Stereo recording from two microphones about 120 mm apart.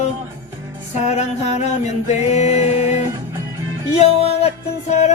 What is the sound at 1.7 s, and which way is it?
Music, 70° left (ahead or behind).